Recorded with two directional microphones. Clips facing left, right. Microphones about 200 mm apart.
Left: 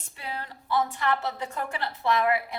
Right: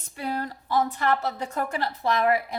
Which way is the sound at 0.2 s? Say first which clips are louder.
Right 7 dB; 40° right (ahead or behind).